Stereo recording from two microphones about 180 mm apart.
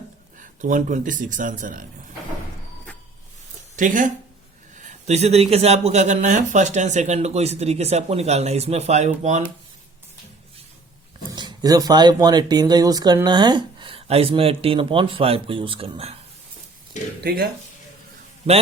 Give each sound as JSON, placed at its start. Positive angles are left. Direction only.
{"t": 0.3, "sound": "speech", "side_deg": -45}
{"t": 3.8, "sound": "speech", "side_deg": -45}
{"t": 11.3, "sound": "speech", "side_deg": -20}
{"t": 17.2, "sound": "speech", "side_deg": -60}
{"t": 18.5, "sound": "speech", "side_deg": -35}